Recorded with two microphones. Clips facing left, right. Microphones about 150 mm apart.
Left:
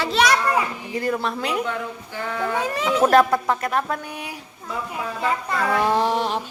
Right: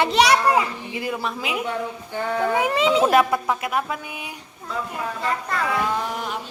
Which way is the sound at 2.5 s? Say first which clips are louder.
Right 2 dB; 20° right (ahead or behind).